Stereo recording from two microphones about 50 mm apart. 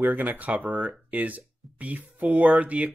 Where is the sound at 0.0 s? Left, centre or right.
Right.